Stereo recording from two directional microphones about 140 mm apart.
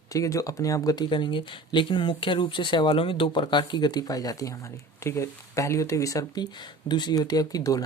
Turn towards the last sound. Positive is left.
turn(degrees=25)  # may be behind; listen again after turning